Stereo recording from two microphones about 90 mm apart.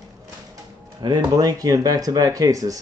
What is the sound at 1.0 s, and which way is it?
Speech, 50° right (ahead or behind).